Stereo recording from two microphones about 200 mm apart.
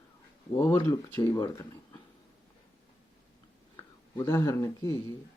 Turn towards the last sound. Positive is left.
turn(degrees=15)  # may be behind; listen again after turning